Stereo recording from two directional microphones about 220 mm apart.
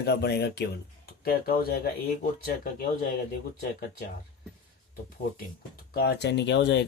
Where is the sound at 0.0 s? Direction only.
50° left (ahead or behind).